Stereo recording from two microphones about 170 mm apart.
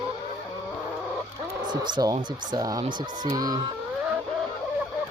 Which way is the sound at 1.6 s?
25° right (ahead or behind).